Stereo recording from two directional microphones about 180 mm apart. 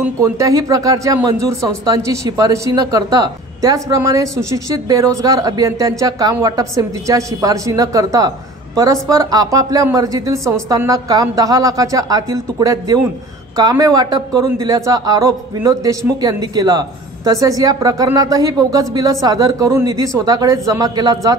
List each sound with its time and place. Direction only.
0.2 s speech: 15° right (ahead or behind)